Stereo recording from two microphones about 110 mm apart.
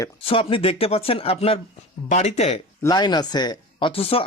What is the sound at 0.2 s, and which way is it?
Speech, 55° left (ahead or behind).